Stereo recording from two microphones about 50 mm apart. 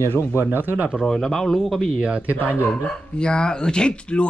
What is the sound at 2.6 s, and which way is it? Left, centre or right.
Speech, left.